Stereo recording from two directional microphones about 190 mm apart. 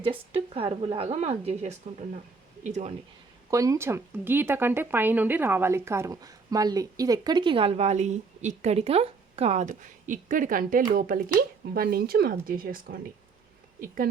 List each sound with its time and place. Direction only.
0.0 s speech: 30° right (ahead or behind)
3.5 s a woman's voice: 15° right (ahead or behind); by 14.1 s 50° right (ahead or behind)